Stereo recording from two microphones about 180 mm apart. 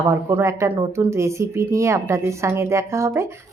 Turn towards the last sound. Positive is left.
turn(degrees=-15)  # may be behind; listen again after turning